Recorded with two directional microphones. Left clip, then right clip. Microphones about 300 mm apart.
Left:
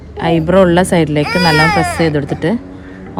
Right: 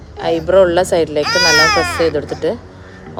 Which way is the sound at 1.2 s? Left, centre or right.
Centre.